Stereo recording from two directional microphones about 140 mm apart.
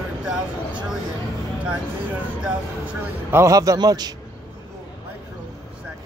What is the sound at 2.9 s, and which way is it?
A man's voice, 20° right (ahead or behind).